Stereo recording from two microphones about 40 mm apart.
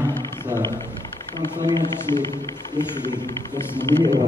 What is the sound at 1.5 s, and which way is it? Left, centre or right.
Speech, left.